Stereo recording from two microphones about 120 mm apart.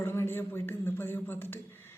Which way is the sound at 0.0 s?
20° left (ahead or behind).